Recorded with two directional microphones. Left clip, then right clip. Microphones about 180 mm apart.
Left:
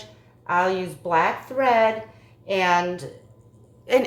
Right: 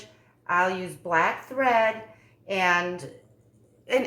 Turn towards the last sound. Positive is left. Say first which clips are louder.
# left 5 dB
turn(degrees=35)  # may be behind; listen again after turning